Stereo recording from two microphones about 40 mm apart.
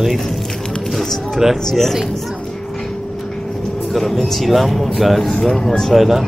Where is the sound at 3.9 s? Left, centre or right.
Centre.